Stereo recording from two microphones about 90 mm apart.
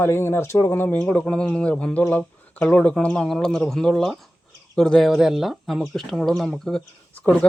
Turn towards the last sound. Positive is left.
turn(degrees=15)  # may be behind; listen again after turning